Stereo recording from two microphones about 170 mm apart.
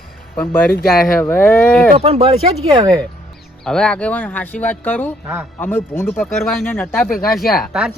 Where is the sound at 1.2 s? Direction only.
10° left (ahead or behind).